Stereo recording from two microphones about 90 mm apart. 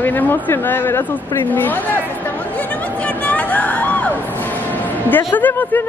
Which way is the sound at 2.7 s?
15° left (ahead or behind).